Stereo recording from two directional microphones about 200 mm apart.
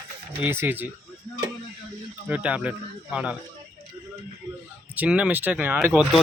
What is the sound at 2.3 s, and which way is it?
Speech, 5° right (ahead or behind).